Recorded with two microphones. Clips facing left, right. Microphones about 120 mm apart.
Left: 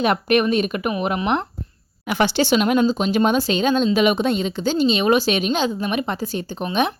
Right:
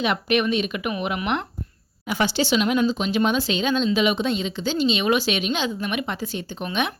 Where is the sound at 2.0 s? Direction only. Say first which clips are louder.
Left 4 dB; 65° left (ahead or behind); by 6.9 s 35° left (ahead or behind).